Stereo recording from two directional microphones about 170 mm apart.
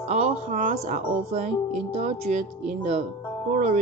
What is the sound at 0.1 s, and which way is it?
Speech, 40° right (ahead or behind).